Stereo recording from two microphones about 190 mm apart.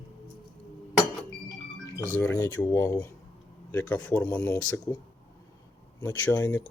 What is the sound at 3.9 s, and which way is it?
Speech, 5° left (ahead or behind).